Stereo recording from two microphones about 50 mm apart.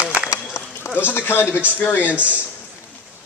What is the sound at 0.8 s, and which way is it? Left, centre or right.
Speech, left.